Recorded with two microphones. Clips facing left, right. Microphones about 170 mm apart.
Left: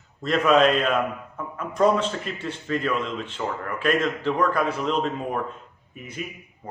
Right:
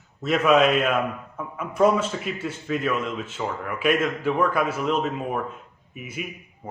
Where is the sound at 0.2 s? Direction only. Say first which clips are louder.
Even; 5° right (ahead or behind).